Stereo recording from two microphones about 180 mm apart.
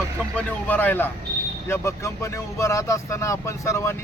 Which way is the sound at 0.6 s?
10° left (ahead or behind).